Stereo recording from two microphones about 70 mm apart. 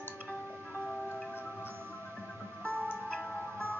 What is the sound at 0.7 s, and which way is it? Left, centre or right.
Tick-tock, centre.